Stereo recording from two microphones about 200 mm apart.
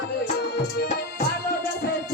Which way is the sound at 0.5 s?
55° left (ahead or behind).